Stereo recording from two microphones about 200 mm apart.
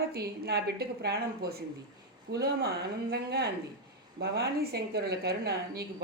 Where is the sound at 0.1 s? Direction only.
50° right (ahead or behind).